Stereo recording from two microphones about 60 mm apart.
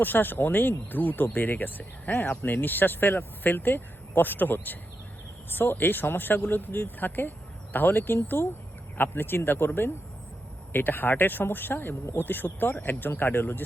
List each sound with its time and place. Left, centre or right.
0.0 s speech: left